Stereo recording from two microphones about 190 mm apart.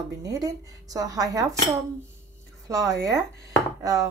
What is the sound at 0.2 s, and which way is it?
Speech, 20° right (ahead or behind).